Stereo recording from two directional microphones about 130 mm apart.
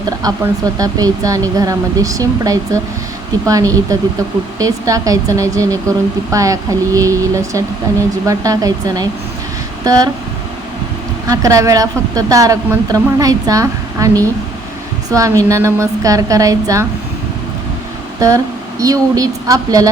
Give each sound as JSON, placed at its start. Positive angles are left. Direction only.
{"t": 0.2, "sound": "a woman's voice", "side_deg": -30}
{"t": 11.3, "sound": "a woman's voice", "side_deg": -25}
{"t": 18.2, "sound": "a woman's voice", "side_deg": -25}